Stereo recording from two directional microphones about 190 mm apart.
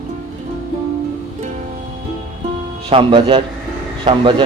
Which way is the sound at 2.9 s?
30° right (ahead or behind).